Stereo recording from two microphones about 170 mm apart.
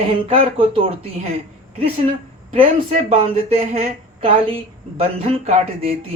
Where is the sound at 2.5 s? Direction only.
35° right (ahead or behind).